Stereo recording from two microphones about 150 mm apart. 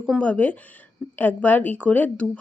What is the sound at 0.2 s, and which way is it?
Speech, 10° left (ahead or behind).